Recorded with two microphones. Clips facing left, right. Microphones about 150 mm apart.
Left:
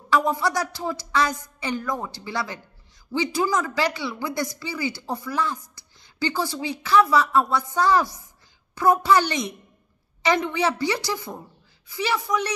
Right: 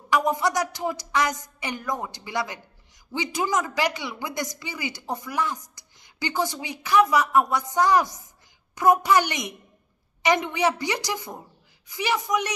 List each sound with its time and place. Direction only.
0.1 s a woman's voice: 20° right (ahead or behind)